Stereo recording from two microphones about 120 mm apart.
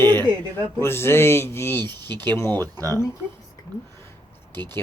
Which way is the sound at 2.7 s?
30° right (ahead or behind).